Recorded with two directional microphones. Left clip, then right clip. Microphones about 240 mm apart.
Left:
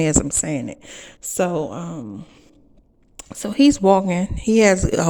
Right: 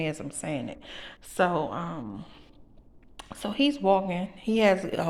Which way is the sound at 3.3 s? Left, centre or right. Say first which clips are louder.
Left 10 dB; left.